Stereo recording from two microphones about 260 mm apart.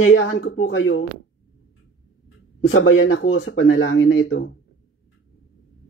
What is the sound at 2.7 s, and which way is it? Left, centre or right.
Speech, left.